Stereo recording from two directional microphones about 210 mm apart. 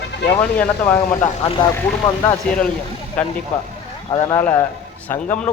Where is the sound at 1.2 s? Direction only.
25° left (ahead or behind).